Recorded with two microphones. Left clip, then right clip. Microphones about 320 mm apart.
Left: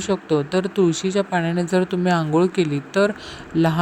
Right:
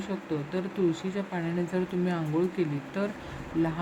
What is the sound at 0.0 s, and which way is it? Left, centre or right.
Speech, left.